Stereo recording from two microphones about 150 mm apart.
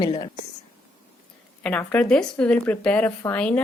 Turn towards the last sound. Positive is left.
turn(degrees=10)  # may be behind; listen again after turning